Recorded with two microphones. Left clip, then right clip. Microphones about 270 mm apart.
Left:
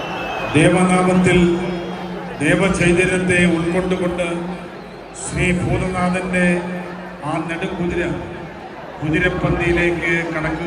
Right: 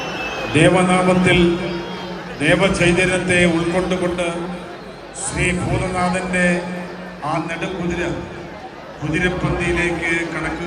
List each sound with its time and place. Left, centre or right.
0.5 s a man's voice: centre
2.4 s a man's voice: right
9.1 s a man's voice: centre